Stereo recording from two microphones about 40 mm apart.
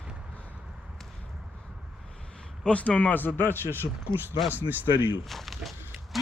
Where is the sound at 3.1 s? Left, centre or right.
Left.